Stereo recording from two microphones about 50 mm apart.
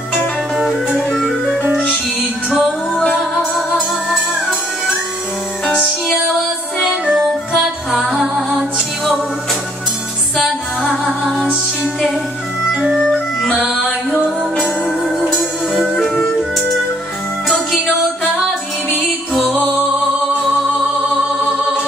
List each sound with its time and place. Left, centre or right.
0.1 s music: centre
3.2 s music: centre
6.8 s music: centre
7.2 s music: centre